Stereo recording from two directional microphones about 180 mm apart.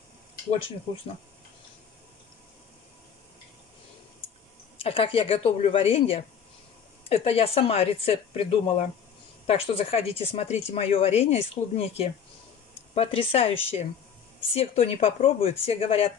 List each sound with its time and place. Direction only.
4.7 s speech: 30° left (ahead or behind)